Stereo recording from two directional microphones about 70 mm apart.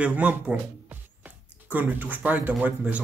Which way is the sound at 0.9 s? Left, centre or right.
Right.